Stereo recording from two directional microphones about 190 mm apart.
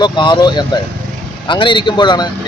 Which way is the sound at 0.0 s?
25° left (ahead or behind).